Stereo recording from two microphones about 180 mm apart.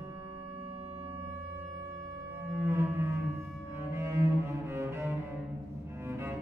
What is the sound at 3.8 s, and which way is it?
Cello, 15° right (ahead or behind).